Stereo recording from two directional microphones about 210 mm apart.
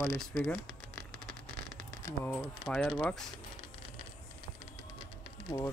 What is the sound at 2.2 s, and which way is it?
Speech, 5° left (ahead or behind).